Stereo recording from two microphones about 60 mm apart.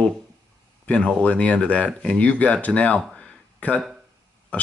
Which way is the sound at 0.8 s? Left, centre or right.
Centre.